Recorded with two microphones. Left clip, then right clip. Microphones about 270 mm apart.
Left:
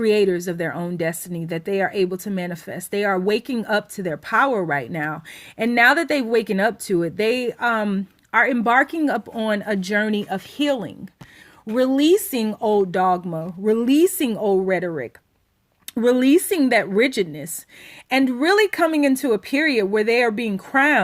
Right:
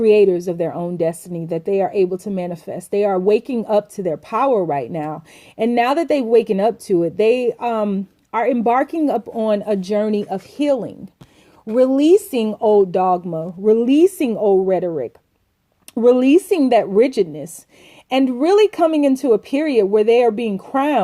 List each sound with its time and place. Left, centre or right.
0.0 s a woman's voice: left
12.0 s a woman's voice: left